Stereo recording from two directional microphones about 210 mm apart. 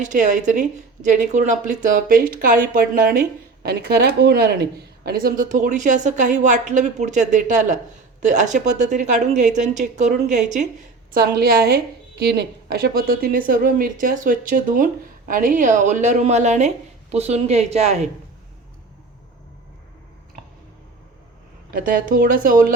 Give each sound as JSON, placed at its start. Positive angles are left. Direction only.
{"t": 0.0, "sound": "a woman's voice", "side_deg": -35}
{"t": 11.1, "sound": "a woman's voice", "side_deg": -45}
{"t": 21.7, "sound": "a woman's voice", "side_deg": -45}